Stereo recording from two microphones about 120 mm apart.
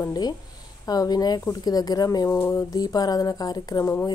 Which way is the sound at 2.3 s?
20° left (ahead or behind).